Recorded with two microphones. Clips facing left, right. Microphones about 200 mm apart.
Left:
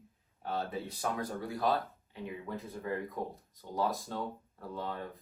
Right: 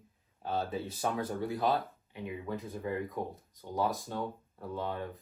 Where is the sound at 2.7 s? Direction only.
20° right (ahead or behind).